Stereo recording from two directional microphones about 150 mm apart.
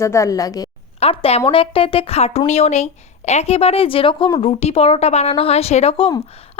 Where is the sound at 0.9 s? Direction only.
40° left (ahead or behind).